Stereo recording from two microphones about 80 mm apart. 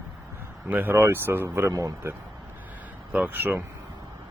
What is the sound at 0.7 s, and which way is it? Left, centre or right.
Speech, right.